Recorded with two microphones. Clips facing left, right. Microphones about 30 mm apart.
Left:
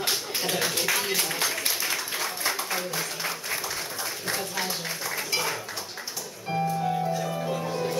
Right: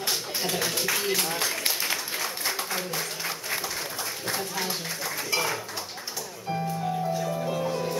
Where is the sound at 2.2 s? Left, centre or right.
Centre.